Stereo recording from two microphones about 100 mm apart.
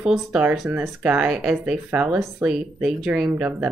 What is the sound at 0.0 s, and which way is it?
Speech, 10° right (ahead or behind).